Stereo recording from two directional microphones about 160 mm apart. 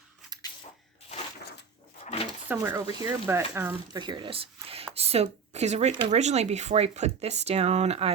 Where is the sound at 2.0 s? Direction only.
40° left (ahead or behind).